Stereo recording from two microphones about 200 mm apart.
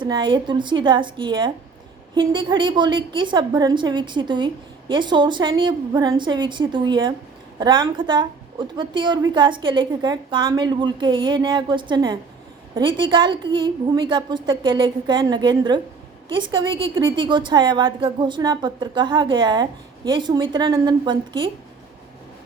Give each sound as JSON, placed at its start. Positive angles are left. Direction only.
{"t": 0.0, "sound": "a woman's voice", "side_deg": -25}